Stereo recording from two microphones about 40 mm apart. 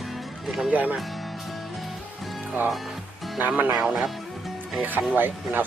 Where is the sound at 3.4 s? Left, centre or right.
Right.